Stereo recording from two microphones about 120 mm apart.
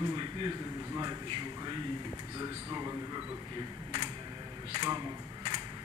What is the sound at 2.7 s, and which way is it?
Speech, 35° right (ahead or behind).